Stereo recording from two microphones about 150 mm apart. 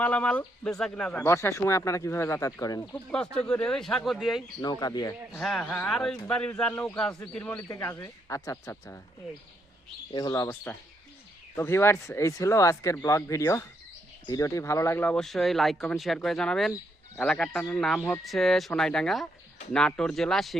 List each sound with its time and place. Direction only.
0.0 s speech: 10° left (ahead or behind)
1.3 s speech: 20° left (ahead or behind)
3.3 s speech: 5° left (ahead or behind)
4.6 s speech: 25° left (ahead or behind)
5.3 s speech: centre (ahead or behind); by 9.0 s 20° left (ahead or behind)
10.1 s speech: 30° left (ahead or behind); by 20.6 s centre (ahead or behind)